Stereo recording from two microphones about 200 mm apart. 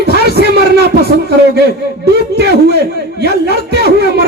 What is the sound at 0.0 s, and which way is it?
Music, 55° right (ahead or behind).